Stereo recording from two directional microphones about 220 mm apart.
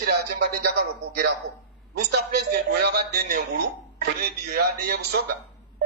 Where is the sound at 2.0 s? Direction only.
50° right (ahead or behind).